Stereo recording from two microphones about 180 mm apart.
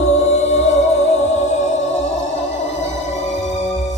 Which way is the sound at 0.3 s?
35° left (ahead or behind).